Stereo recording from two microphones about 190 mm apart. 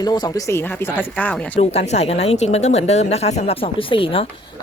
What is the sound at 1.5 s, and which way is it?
Speech, 35° left (ahead or behind).